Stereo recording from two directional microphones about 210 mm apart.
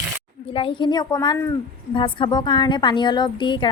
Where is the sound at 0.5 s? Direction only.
25° left (ahead or behind).